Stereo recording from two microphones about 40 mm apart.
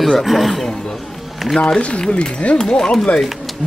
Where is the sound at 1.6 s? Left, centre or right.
Left.